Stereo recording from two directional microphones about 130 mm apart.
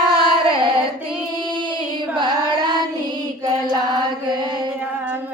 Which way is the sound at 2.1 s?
35° right (ahead or behind).